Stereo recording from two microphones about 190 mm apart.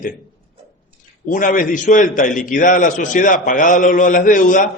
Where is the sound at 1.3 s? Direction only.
45° left (ahead or behind).